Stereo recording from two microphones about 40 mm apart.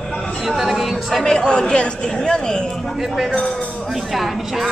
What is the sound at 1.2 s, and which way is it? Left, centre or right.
Speech, left.